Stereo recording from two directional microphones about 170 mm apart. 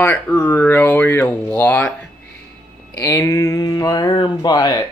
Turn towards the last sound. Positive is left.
turn(degrees=20)  # may be behind; listen again after turning